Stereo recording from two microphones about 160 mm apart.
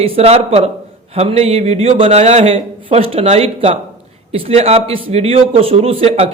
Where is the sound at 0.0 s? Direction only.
35° right (ahead or behind).